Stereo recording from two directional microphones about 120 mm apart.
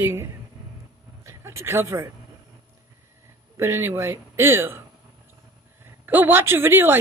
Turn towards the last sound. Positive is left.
turn(degrees=-20)  # may be behind; listen again after turning